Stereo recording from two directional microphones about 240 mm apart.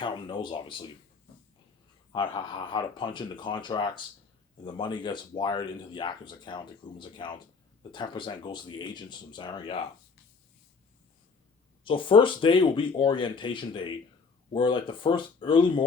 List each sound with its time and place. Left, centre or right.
0.0 s speech: centre
2.1 s speech: centre
11.9 s speech: left